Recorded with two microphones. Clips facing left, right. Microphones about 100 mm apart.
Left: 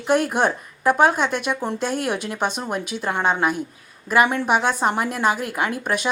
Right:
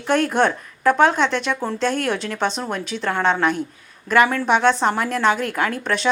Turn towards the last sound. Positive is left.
turn(degrees=10)  # may be behind; listen again after turning